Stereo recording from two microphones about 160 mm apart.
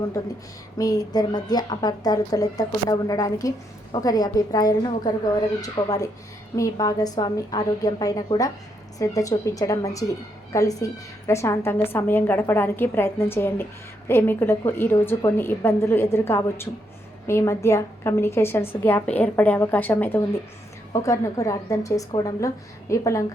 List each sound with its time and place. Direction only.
0.8 s a woman's voice: 20° left (ahead or behind)